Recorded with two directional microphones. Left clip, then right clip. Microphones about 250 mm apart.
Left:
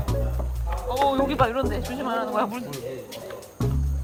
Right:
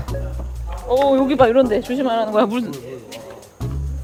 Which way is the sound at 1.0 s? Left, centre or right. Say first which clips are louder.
Right 6 dB; right.